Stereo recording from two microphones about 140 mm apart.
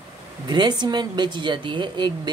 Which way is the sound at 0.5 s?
30° right (ahead or behind).